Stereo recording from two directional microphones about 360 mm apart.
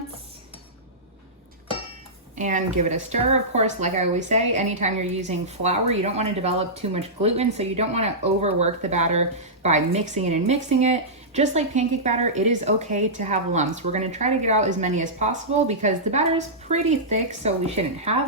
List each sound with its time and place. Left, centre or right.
2.3 s a woman's voice: right
17.4 s a woman's voice: centre